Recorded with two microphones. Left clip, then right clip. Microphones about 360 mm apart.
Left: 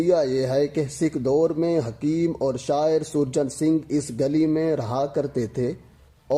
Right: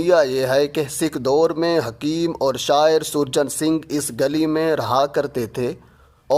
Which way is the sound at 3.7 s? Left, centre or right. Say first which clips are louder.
Right 1 dB; right.